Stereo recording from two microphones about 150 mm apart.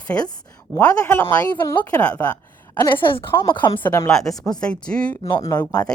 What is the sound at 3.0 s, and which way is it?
Speech, 35° left (ahead or behind).